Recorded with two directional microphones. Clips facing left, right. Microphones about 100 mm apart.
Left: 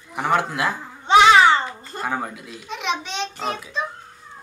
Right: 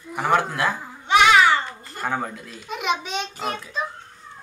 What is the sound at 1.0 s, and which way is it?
Babbling, 30° left (ahead or behind).